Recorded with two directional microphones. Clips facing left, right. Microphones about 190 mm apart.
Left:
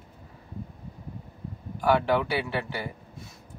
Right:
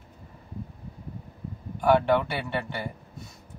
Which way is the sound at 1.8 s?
Centre (ahead or behind).